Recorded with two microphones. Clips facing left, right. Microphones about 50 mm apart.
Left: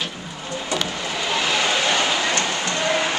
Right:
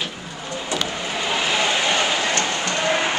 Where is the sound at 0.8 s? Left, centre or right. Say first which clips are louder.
Even; centre.